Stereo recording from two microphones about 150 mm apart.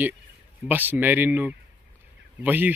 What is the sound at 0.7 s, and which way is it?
Speech, 10° right (ahead or behind).